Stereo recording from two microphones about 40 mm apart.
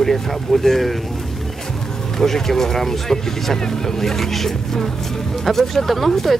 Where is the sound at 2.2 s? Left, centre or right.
Centre.